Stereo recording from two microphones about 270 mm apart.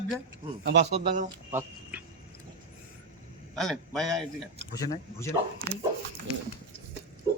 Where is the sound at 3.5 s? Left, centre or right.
Centre.